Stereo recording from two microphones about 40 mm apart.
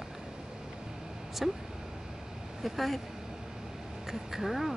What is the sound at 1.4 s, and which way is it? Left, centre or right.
Speech, centre.